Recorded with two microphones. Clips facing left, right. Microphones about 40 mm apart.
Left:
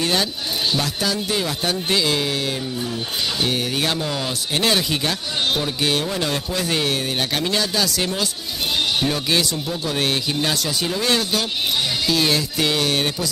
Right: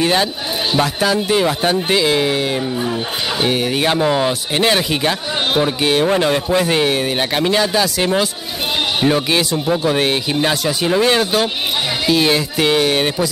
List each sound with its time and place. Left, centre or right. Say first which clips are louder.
0.0 s speech: right 5 dB; right